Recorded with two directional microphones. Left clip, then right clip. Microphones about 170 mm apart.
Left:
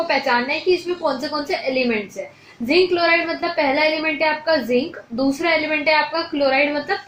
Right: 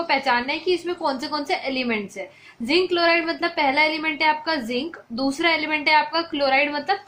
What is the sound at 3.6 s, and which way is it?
A woman's voice, 35° right (ahead or behind).